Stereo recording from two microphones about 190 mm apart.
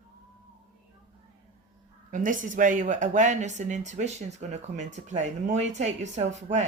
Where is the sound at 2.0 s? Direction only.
45° right (ahead or behind).